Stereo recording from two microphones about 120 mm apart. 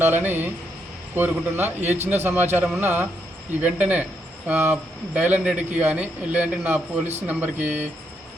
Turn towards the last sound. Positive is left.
turn(degrees=-15)  # may be behind; listen again after turning